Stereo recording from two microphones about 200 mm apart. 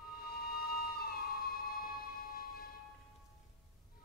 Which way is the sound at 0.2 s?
50° left (ahead or behind).